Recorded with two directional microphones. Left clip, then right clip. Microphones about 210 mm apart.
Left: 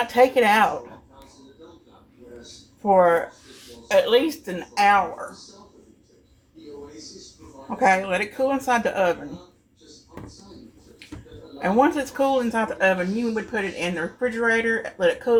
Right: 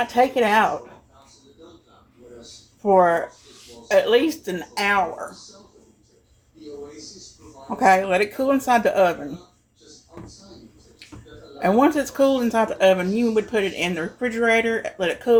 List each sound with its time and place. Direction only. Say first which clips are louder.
0.1 s speech: left 2 dB; 10° right (ahead or behind)
2.8 s speech: right 1 dB; 10° right (ahead or behind)
7.8 s speech: right 3 dB; 20° right (ahead or behind)
11.6 s speech: right 2 dB; 25° right (ahead or behind)